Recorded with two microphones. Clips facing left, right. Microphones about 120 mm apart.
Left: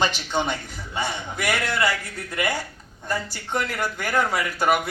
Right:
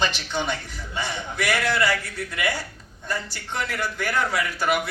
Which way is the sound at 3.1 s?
50° left (ahead or behind).